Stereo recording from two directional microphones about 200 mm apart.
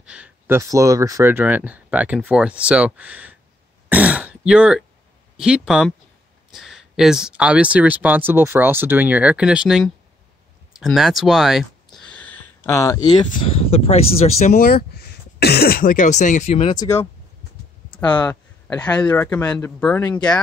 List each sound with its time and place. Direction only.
0.0 s speech: 5° right (ahead or behind); by 16.7 s 30° left (ahead or behind)
16.7 s a man's voice: 15° left (ahead or behind)